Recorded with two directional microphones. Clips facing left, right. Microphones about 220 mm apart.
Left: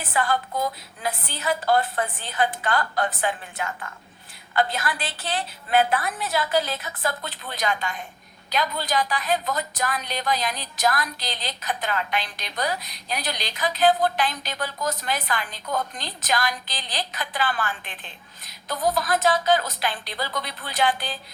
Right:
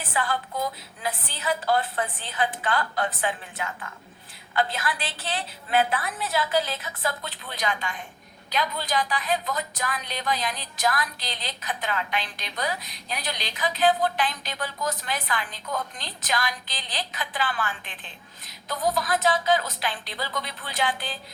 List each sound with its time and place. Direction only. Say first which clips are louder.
0.1 s a woman's voice: left 4 dB; 45° left (ahead or behind)
18.9 s a woman's voice: left 2 dB; 45° left (ahead or behind)